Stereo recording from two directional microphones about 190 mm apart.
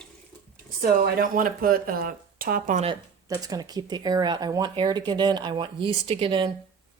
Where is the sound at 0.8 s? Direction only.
50° right (ahead or behind).